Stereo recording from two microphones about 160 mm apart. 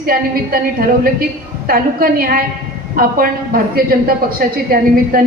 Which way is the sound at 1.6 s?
65° right (ahead or behind).